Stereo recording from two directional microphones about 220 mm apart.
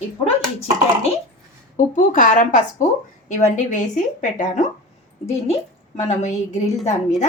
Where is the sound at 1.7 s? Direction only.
35° left (ahead or behind).